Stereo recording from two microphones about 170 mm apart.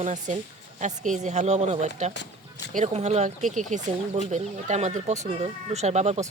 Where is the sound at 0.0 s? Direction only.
45° right (ahead or behind).